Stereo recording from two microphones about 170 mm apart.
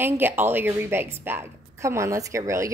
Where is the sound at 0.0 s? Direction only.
10° right (ahead or behind).